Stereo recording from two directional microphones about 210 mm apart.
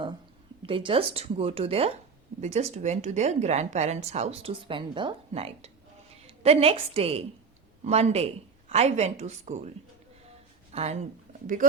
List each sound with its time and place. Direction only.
0.6 s a woman's voice: 25° right (ahead or behind)